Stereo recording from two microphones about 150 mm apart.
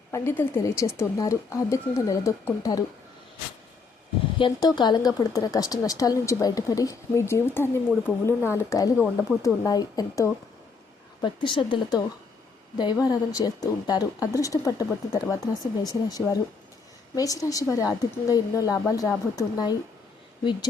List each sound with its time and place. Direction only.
0.1 s a woman's voice: 15° left (ahead or behind)
4.4 s a woman's voice: 30° left (ahead or behind)
11.2 s a woman's voice: 30° left (ahead or behind)